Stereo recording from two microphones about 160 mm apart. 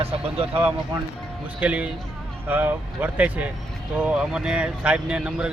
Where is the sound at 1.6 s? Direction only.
10° right (ahead or behind).